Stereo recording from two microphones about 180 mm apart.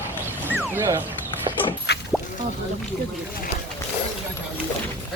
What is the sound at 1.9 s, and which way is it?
Music, 65° left (ahead or behind).